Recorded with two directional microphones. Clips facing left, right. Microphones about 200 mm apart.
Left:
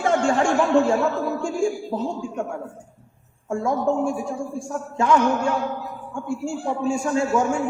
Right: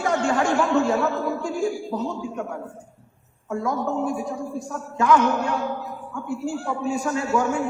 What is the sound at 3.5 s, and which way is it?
A man's voice, 25° left (ahead or behind).